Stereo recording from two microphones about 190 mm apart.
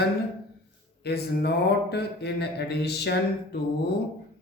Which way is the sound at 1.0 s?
60° left (ahead or behind).